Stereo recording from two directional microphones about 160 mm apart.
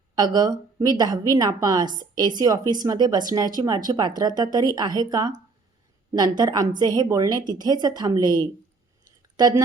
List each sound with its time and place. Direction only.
0.2 s a woman's voice: 25° right (ahead or behind)